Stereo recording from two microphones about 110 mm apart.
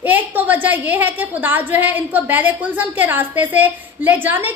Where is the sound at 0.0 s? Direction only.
15° right (ahead or behind).